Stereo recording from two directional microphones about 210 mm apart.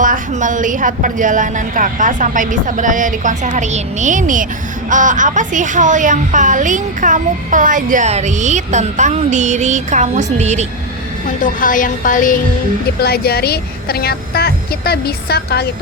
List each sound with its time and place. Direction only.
0.0 s speech: 40° right (ahead or behind)
11.4 s music: 40° left (ahead or behind)
13.0 s a woman's voice: 50° left (ahead or behind)